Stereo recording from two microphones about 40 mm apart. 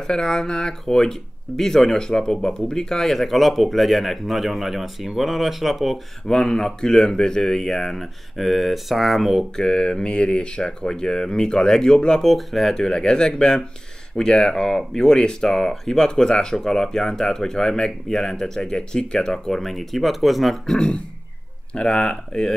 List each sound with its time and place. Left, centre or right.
0.0 s speech: centre
3.0 s speech: centre
6.2 s speech: centre
9.6 s speech: centre
12.3 s speech: centre
12.7 s speech: centre
15.4 s speech: centre
20.6 s speech: centre
21.7 s speech: left
22.1 s speech: centre